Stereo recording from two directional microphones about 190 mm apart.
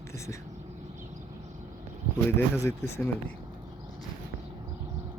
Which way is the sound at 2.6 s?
15° left (ahead or behind).